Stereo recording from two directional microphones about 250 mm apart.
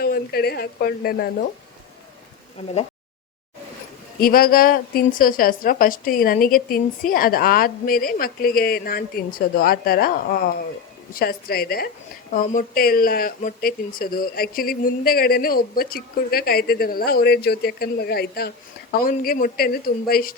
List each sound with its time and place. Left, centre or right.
0.0 s speech: left
4.2 s speech: left